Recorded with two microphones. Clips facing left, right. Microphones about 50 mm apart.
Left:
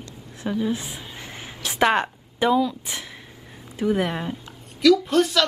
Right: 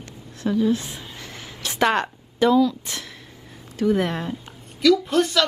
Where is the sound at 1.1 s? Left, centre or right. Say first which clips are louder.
Left 1 dB; centre.